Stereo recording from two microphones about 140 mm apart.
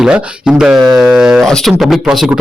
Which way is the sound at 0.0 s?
5° right (ahead or behind).